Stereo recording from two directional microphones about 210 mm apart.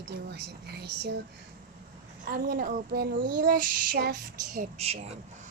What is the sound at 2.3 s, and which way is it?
Speech, 45° right (ahead or behind).